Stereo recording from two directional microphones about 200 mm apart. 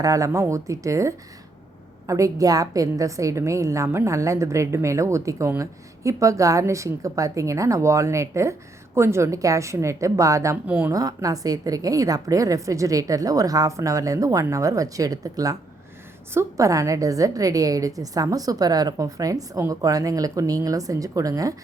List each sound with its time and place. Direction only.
0.0 s a woman's voice: 15° right (ahead or behind)